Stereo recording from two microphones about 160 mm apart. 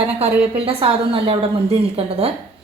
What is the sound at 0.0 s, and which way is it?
A woman's voice, 35° right (ahead or behind).